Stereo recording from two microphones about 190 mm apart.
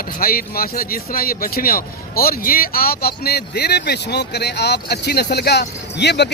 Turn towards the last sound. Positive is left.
turn(degrees=65)  # may be behind; listen again after turning